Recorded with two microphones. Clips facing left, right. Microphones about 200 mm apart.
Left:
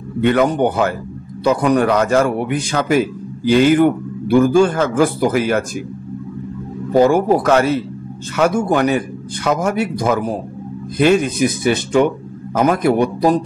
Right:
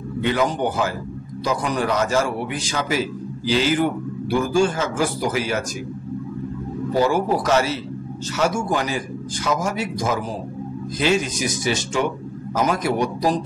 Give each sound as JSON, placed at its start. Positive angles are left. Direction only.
{"t": 0.2, "sound": "a man's voice", "side_deg": 60}
{"t": 7.0, "sound": "a man's voice", "side_deg": 55}